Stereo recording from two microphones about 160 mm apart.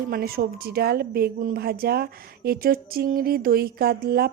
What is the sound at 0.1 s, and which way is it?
A woman's voice, 70° right (ahead or behind).